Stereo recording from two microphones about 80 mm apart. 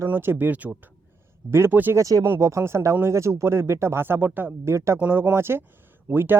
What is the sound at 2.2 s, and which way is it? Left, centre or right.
Speech, right.